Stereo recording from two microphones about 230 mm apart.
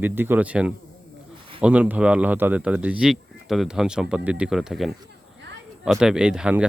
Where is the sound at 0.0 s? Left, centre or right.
Centre.